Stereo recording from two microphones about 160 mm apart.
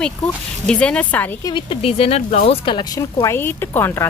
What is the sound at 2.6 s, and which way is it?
Speech, 30° left (ahead or behind).